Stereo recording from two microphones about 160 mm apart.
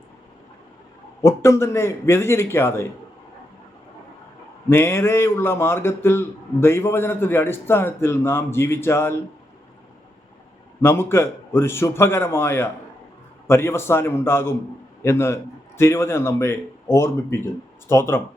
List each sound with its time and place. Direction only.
1.2 s a man's voice: 15° left (ahead or behind)
4.7 s a man's voice: 15° left (ahead or behind)
10.8 s a man's voice: 15° left (ahead or behind)